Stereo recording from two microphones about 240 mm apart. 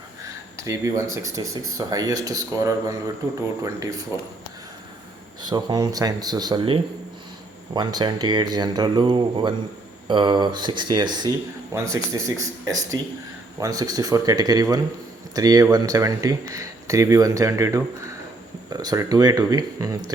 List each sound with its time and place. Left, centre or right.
0.5 s speech: centre
5.4 s speech: centre